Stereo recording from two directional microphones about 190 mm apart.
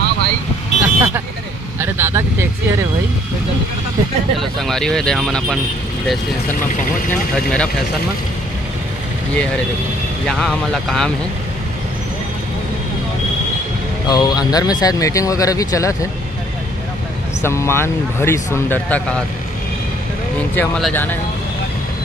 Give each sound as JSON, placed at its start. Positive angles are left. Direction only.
{"t": 0.8, "sound": "vehicle", "side_deg": -10}
{"t": 4.4, "sound": "speech", "side_deg": 0}
{"t": 7.1, "sound": "speech", "side_deg": 5}
{"t": 10.2, "sound": "speech", "side_deg": 0}
{"t": 14.0, "sound": "speech", "side_deg": 20}
{"t": 17.4, "sound": "speech", "side_deg": 15}
{"t": 20.5, "sound": "speech", "side_deg": 5}